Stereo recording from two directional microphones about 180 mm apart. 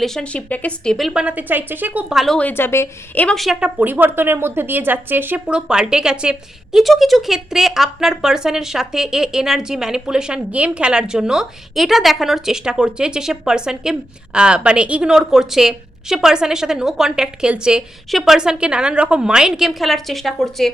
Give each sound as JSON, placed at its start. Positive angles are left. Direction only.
{"t": 0.0, "sound": "speech", "side_deg": 5}